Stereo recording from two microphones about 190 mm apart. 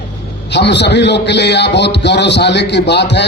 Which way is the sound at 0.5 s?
65° left (ahead or behind).